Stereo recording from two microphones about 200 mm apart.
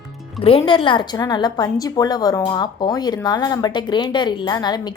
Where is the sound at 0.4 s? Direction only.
25° left (ahead or behind).